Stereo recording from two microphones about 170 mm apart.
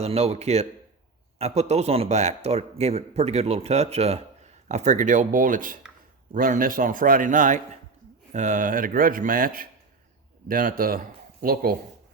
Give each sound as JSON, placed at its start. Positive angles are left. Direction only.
{"t": 0.0, "sound": "a man's voice", "side_deg": -40}